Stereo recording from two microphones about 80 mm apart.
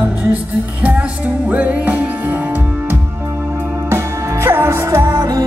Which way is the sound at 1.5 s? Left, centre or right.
Centre.